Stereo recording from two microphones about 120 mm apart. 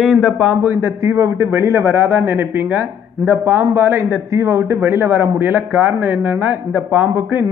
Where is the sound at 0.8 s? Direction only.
25° right (ahead or behind).